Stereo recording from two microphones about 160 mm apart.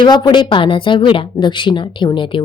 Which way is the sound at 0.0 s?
30° left (ahead or behind).